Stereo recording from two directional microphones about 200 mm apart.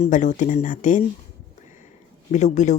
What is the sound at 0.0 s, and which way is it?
Speech, 40° left (ahead or behind).